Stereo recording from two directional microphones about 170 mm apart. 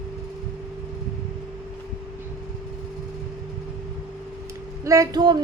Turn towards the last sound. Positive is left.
turn(degrees=-25)  # may be behind; listen again after turning